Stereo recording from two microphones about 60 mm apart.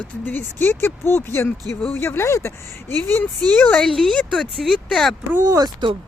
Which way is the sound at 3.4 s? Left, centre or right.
Centre.